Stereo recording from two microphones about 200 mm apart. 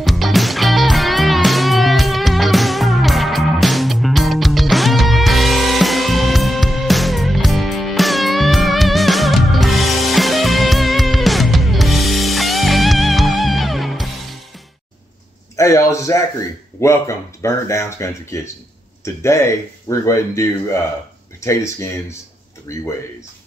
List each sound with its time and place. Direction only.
0.0 s music: centre (ahead or behind)
15.5 s a man's voice: 15° left (ahead or behind)